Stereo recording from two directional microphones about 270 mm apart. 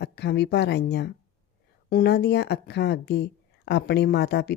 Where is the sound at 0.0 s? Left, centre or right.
Left.